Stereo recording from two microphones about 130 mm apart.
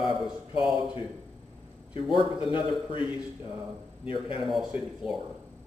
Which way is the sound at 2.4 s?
40° left (ahead or behind).